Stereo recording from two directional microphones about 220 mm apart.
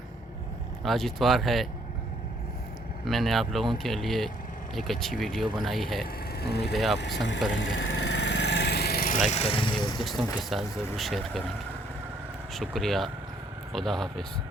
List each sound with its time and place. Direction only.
0.8 s speech: centre (ahead or behind)
3.0 s speech: centre (ahead or behind)
6.4 s speech: 45° left (ahead or behind)
6.7 s speech: centre (ahead or behind)
7.5 s vehicle: 55° left (ahead or behind); by 9.2 s 40° left (ahead or behind)
9.3 s speech: 25° left (ahead or behind)
10.0 s speech: centre (ahead or behind)
12.5 s speech: centre (ahead or behind)